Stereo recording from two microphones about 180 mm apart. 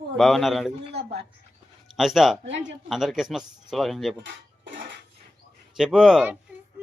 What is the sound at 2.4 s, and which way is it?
Speech, 85° right.